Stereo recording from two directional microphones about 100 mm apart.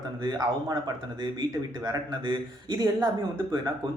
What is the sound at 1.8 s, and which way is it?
A man's voice, 45° right (ahead or behind).